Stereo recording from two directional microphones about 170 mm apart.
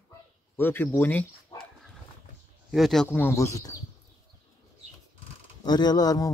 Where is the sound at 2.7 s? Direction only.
Centre (ahead or behind); by 3.7 s 20° left (ahead or behind).